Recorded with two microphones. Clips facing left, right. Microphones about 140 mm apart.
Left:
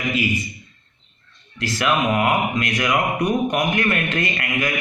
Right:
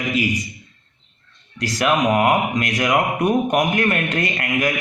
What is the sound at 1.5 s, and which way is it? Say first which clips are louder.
A man's voice: right 2 dB; 40° right (ahead or behind).